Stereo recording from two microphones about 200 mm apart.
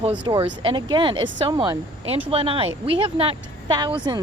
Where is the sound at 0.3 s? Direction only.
20° right (ahead or behind).